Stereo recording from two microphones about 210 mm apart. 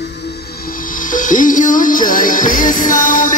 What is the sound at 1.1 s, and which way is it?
Music, 40° left (ahead or behind).